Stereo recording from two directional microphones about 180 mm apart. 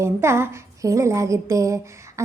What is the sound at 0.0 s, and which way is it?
A woman's voice, 15° right (ahead or behind).